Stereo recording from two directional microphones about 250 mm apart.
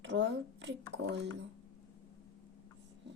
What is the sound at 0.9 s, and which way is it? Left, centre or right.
Speech, right.